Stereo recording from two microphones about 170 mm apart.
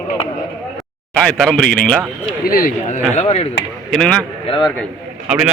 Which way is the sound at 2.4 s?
60° left (ahead or behind).